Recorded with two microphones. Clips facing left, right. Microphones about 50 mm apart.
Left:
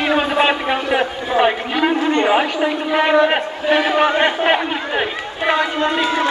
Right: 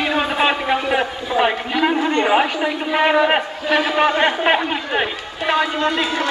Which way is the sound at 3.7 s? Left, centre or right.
Left.